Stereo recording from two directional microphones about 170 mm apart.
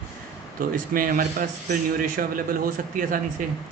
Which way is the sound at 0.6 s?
55° right (ahead or behind).